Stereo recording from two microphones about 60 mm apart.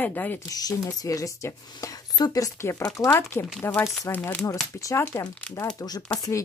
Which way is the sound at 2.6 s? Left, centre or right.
Left.